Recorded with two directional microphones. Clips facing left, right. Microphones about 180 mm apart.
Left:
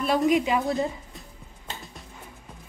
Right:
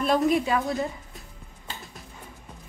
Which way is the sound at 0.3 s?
15° left (ahead or behind).